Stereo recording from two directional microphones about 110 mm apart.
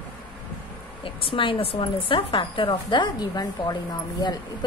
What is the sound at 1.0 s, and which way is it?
A woman's voice, 50° left (ahead or behind).